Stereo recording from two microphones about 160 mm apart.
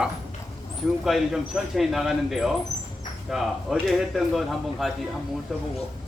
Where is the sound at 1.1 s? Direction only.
Centre (ahead or behind).